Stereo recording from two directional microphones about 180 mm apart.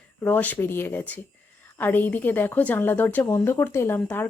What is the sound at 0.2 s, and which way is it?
A woman's voice, 10° left (ahead or behind).